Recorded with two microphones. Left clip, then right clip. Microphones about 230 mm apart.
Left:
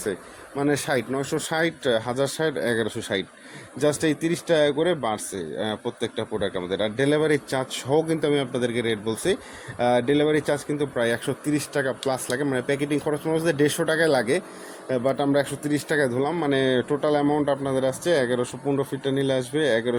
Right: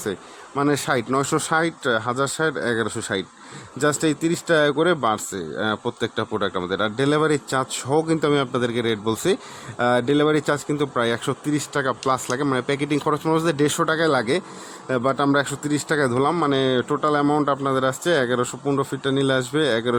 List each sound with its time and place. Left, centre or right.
0.0 s speech: centre